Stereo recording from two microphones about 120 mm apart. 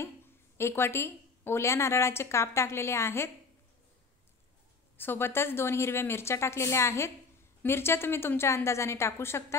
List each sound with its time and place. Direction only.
0.6 s a woman's voice: 20° left (ahead or behind)
4.9 s a woman's voice: 15° left (ahead or behind)